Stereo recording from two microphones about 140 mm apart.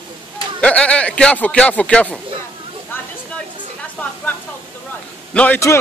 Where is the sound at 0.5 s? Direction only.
10° left (ahead or behind).